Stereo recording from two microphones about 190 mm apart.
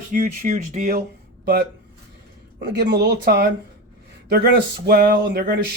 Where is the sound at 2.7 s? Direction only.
60° right (ahead or behind).